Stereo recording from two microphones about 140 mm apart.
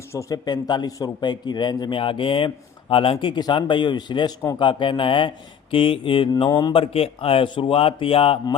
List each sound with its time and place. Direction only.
0.1 s a man's voice: 25° left (ahead or behind)
6.8 s a man's voice: 45° left (ahead or behind)